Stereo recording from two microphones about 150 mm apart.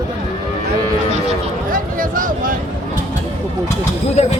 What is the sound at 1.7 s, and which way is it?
Speech, 65° right (ahead or behind).